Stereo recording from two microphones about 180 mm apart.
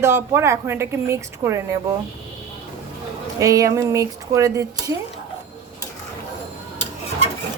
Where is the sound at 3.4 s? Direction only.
20° right (ahead or behind).